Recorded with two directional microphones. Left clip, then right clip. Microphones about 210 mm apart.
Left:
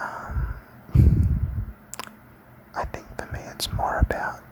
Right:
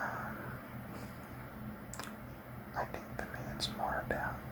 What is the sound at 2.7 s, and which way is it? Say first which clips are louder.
Whispering: left 9 dB; 30° left (ahead or behind).